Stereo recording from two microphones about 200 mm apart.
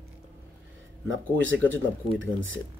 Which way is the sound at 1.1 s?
70° right (ahead or behind).